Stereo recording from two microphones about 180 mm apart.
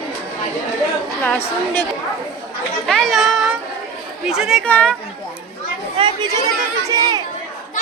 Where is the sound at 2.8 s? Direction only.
Centre (ahead or behind).